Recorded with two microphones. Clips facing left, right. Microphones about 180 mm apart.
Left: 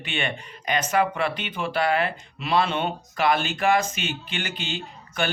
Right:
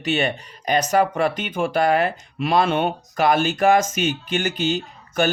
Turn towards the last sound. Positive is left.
turn(degrees=-45)  # may be behind; listen again after turning